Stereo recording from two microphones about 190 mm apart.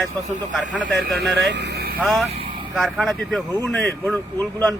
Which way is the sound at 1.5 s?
60° right (ahead or behind).